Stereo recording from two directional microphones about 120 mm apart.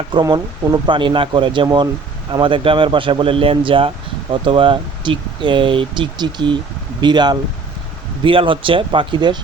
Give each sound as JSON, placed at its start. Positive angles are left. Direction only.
{"t": 0.1, "sound": "speech", "side_deg": -35}